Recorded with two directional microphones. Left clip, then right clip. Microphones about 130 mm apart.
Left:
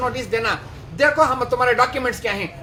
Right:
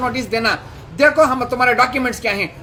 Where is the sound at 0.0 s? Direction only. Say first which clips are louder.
Right 3 dB; 35° right (ahead or behind).